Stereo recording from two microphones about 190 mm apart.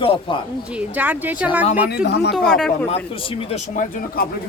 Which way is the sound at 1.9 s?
60° left (ahead or behind).